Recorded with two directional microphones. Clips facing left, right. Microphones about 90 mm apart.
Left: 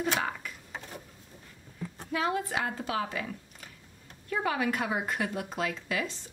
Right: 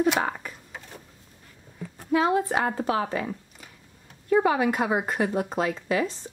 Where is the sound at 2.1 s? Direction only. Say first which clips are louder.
Right 8 dB; 30° right (ahead or behind).